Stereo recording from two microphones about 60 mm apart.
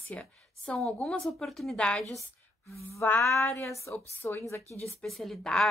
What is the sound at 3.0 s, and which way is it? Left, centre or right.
A woman's voice, left.